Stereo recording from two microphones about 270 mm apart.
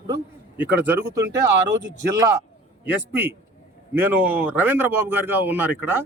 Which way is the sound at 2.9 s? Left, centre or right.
Centre.